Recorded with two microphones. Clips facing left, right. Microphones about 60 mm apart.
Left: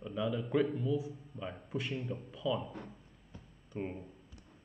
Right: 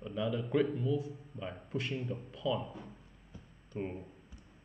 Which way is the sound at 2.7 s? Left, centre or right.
Left.